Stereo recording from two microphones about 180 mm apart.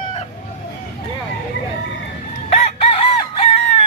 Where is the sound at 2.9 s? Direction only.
35° left (ahead or behind).